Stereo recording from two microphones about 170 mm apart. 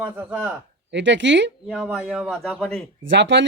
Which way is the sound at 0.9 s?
90° right.